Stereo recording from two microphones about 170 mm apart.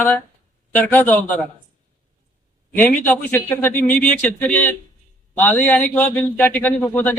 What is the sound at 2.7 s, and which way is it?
Speech, 10° left (ahead or behind).